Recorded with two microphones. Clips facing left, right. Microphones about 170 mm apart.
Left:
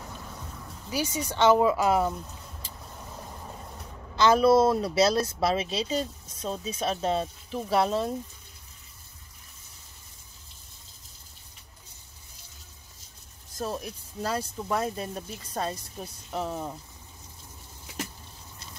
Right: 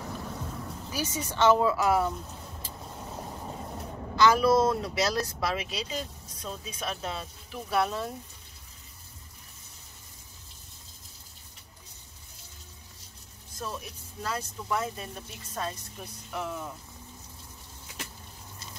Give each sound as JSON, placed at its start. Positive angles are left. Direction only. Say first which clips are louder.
{"t": 0.9, "sound": "speech", "louder": "left 3 dB", "side_deg": 15}
{"t": 4.2, "sound": "speech", "louder": "left 2 dB", "side_deg": 25}
{"t": 13.6, "sound": "speech", "louder": "left 5 dB", "side_deg": 40}